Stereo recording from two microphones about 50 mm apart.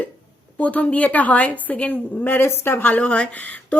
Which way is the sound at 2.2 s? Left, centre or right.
Left.